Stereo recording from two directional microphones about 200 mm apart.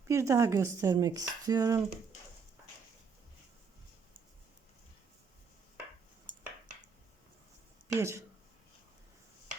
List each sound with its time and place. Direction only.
0.0 s speech: 15° right (ahead or behind)
7.9 s speech: 15° right (ahead or behind)